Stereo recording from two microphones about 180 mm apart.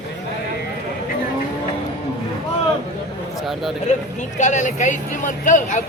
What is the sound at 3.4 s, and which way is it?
Speech, centre (ahead or behind).